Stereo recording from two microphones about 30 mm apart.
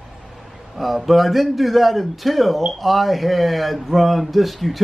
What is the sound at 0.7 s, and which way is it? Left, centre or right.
Speech, centre.